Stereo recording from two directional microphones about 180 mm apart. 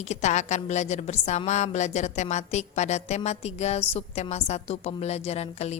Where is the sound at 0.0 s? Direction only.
40° left (ahead or behind).